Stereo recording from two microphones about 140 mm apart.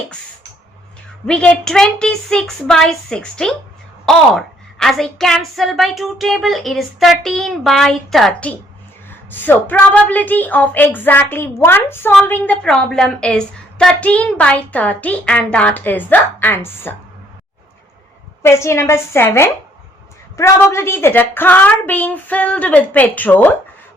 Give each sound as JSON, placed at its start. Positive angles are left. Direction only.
{"t": 1.3, "sound": "a woman's voice", "side_deg": 5}
{"t": 18.4, "sound": "a woman's voice", "side_deg": 20}